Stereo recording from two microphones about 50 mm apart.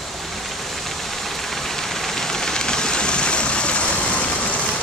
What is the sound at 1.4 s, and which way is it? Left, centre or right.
Vehicle, centre.